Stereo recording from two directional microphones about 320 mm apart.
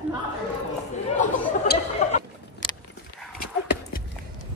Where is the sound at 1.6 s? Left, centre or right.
Left.